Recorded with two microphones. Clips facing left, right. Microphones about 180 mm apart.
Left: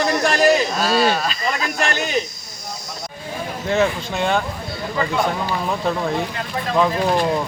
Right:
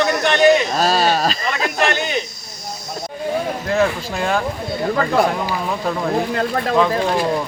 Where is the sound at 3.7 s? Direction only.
Centre (ahead or behind).